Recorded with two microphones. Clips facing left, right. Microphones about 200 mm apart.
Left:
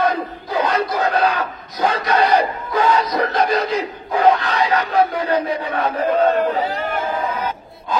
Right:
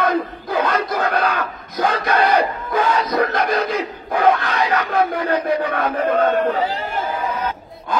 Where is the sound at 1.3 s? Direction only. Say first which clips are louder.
Right 1 dB; 50° right (ahead or behind).